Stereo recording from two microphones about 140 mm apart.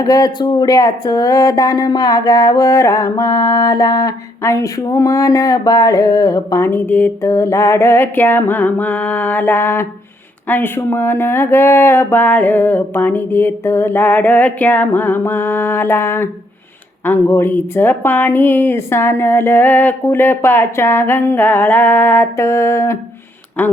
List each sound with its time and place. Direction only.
0.0 s a woman's voice: 25° left (ahead or behind)